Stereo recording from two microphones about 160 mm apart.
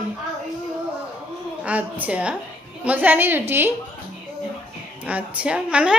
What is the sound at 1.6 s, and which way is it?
A woman's voice, 10° right (ahead or behind).